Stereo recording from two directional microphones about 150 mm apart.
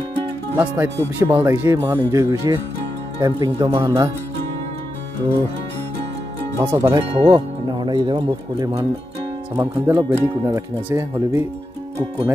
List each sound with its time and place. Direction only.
0.6 s speech: 15° right (ahead or behind)
6.6 s speech: 20° right (ahead or behind)